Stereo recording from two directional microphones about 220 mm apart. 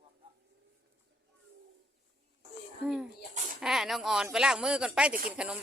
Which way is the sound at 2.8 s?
Centre (ahead or behind).